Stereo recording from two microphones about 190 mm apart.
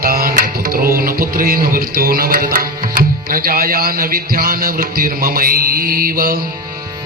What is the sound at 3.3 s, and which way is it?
A man's voice, 50° right (ahead or behind).